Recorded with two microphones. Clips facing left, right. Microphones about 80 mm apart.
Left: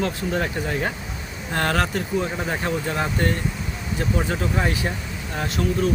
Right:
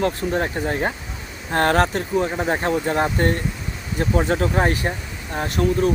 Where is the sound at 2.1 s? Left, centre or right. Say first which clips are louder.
Right 5 dB; centre.